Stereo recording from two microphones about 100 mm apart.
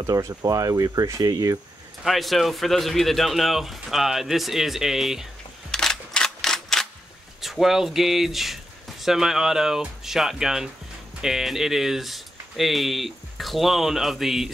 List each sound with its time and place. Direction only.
0.0 s speech: 35° right (ahead or behind)
2.0 s speech: centre (ahead or behind)